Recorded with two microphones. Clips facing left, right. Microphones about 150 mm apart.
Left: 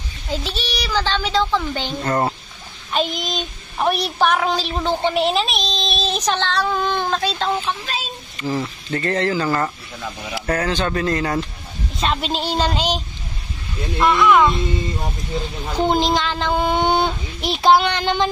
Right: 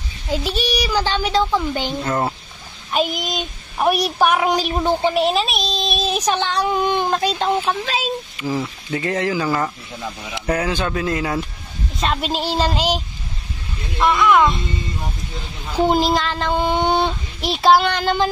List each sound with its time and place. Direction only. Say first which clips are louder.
0.3 s speech: right 4 dB; 10° right (ahead or behind)
2.0 s speech: left 1 dB; centre (ahead or behind)
5.1 s speech: right 1 dB; centre (ahead or behind)
7.8 s speech: right 5 dB; 90° right
8.4 s speech: left 5 dB; 10° right (ahead or behind)
15.8 s speech: right 1 dB; 5° right (ahead or behind)